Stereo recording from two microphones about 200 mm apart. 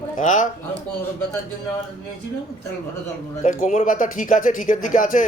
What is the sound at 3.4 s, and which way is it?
Speech, 40° left (ahead or behind).